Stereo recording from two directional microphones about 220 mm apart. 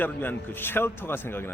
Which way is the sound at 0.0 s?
10° left (ahead or behind).